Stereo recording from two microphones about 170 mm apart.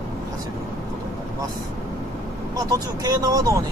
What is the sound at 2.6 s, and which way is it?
Speech, 20° right (ahead or behind).